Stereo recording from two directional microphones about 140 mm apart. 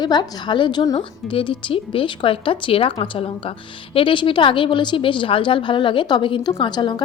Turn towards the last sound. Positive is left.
turn(degrees=30)  # may be behind; listen again after turning